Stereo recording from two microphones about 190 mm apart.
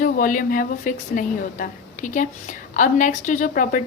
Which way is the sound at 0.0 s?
45° left (ahead or behind).